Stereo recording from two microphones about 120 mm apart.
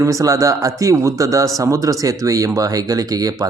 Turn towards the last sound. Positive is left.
turn(degrees=-30)  # may be behind; listen again after turning